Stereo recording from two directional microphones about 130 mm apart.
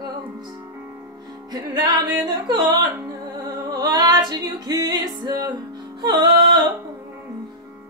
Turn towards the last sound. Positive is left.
turn(degrees=-35)  # may be behind; listen again after turning